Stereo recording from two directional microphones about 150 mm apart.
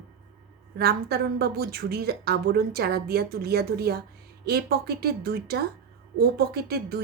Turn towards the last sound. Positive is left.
turn(degrees=-90)